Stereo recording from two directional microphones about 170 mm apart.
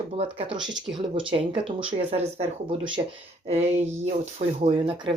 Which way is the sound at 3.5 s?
40° right (ahead or behind).